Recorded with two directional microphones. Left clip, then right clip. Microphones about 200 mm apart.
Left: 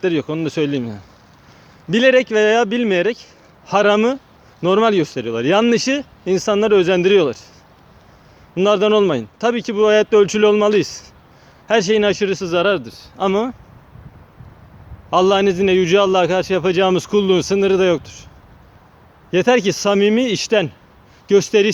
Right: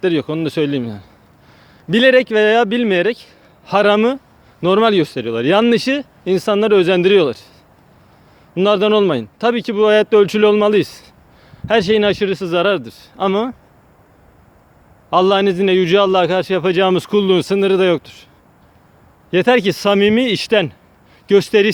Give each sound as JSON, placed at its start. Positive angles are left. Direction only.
{"t": 0.0, "sound": "a man's voice", "side_deg": -20}
{"t": 8.5, "sound": "a man's voice", "side_deg": -15}
{"t": 15.1, "sound": "a man's voice", "side_deg": -10}
{"t": 19.3, "sound": "a man's voice", "side_deg": -15}